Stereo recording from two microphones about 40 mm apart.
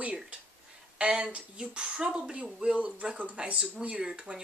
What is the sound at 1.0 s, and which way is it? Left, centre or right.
Speech, right.